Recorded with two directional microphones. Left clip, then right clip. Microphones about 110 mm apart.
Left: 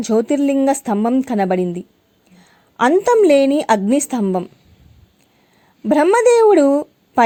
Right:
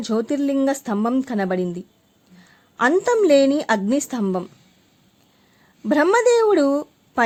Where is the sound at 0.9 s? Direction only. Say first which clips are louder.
Left 5 dB; 20° left (ahead or behind).